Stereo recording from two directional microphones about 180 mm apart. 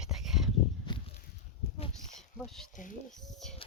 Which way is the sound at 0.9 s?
25° left (ahead or behind).